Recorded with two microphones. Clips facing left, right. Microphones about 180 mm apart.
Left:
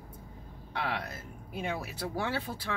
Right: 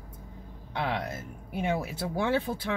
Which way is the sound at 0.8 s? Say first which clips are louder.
Right 5 dB; 20° right (ahead or behind).